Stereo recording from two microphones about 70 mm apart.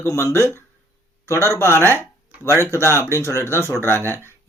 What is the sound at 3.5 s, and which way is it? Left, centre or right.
Speech, left.